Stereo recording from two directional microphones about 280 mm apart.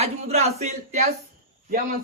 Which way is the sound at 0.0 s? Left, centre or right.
Right.